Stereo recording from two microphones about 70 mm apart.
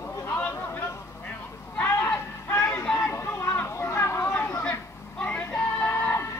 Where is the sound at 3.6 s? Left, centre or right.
Left.